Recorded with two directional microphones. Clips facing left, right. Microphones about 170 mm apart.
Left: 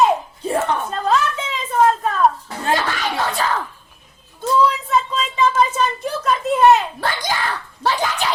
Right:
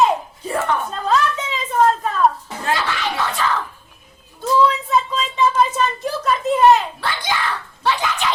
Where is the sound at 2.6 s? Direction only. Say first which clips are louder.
Left 1 dB; 40° left (ahead or behind).